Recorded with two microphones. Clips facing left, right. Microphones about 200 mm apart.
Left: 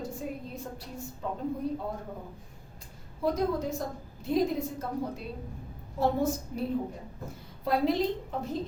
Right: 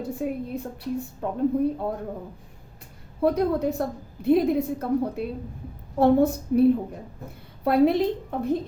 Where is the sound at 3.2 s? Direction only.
60° right (ahead or behind).